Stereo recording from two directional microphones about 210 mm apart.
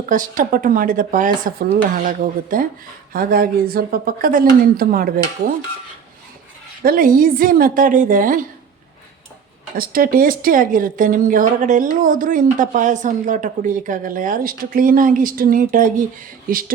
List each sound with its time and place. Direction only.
0.0 s speech: 40° right (ahead or behind)
6.8 s speech: 40° right (ahead or behind)
9.7 s speech: 45° right (ahead or behind)